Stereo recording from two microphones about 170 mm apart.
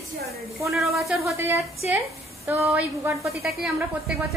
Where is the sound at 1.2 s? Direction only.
15° right (ahead or behind).